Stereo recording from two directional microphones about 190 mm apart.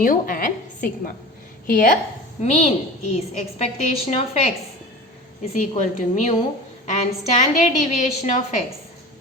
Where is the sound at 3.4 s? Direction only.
35° left (ahead or behind).